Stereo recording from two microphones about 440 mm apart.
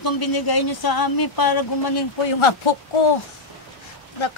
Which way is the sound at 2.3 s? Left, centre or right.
Left.